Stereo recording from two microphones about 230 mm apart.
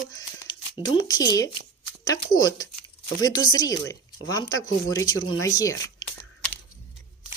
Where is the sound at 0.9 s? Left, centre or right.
Centre.